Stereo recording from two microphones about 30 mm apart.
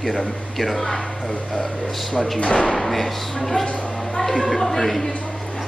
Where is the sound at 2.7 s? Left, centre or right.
Centre.